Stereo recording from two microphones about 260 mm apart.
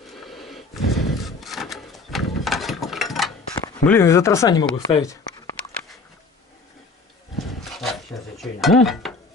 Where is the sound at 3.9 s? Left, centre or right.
Centre.